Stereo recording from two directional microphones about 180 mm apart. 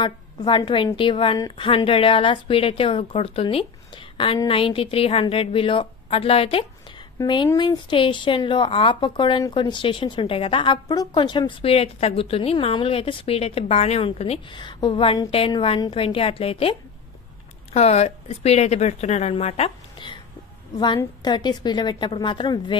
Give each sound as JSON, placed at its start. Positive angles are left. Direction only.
{"t": 0.0, "sound": "a woman's voice", "side_deg": 25}
{"t": 7.2, "sound": "a woman's voice", "side_deg": 20}
{"t": 17.7, "sound": "a woman's voice", "side_deg": 35}